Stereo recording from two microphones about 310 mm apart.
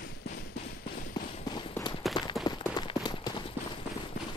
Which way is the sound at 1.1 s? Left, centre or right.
Centre.